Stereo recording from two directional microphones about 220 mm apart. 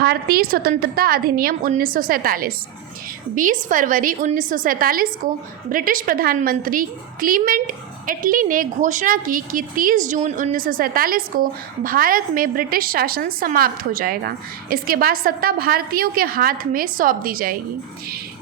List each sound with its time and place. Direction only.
0.0 s a woman's voice: 45° right (ahead or behind)